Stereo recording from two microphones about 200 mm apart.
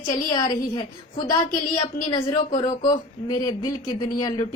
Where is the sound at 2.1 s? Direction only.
20° left (ahead or behind).